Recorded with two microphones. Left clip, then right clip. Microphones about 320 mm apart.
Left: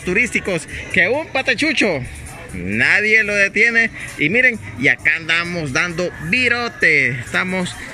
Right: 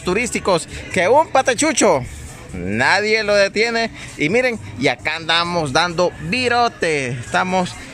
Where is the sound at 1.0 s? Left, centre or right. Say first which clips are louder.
Right 4 dB; right.